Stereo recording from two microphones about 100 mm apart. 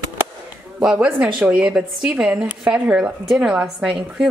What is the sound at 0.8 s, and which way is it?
A woman's voice, 10° right (ahead or behind).